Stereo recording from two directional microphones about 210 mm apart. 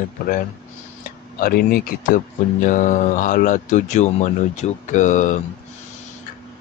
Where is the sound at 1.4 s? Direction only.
45° left (ahead or behind).